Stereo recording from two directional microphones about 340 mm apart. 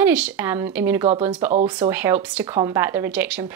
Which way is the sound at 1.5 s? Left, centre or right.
Centre.